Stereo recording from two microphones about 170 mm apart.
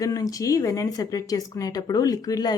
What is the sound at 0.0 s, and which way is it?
Speech, 20° left (ahead or behind).